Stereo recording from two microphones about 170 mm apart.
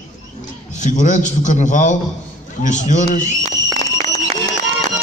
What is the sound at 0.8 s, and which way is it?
A man's voice, 45° left (ahead or behind).